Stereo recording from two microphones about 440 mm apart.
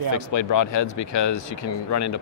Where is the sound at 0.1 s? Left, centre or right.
Left.